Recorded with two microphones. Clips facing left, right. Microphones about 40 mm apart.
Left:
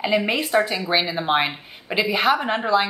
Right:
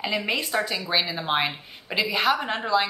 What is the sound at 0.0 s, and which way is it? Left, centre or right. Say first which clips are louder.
A woman's voice: left 5 dB; centre.